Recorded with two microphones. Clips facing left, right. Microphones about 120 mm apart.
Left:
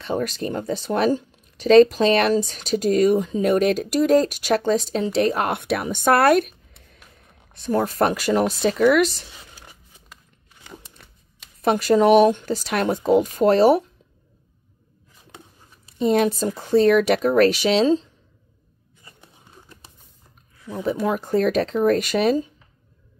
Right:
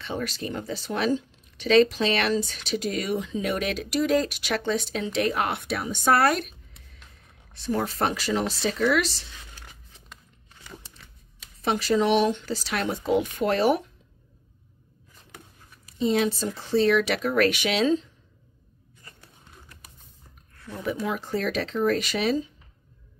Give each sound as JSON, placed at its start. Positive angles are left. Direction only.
{"t": 0.0, "sound": "speech", "side_deg": 40}
{"t": 5.6, "sound": "a woman's voice", "side_deg": 60}
{"t": 7.5, "sound": "speech", "side_deg": 45}
{"t": 9.3, "sound": "zipper", "side_deg": 10}
{"t": 11.6, "sound": "speech", "side_deg": 50}
{"t": 16.0, "sound": "speech", "side_deg": 50}
{"t": 19.0, "sound": "a sound", "side_deg": 20}
{"t": 21.0, "sound": "speech", "side_deg": 45}